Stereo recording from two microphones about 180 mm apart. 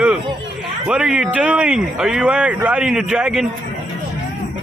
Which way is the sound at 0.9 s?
5° right (ahead or behind).